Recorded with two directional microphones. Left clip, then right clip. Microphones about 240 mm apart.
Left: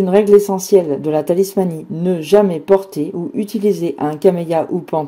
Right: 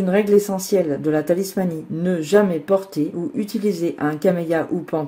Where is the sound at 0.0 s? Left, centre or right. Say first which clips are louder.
Left 6 dB; centre.